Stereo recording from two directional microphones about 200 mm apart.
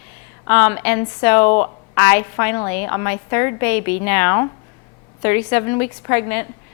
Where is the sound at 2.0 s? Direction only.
10° left (ahead or behind).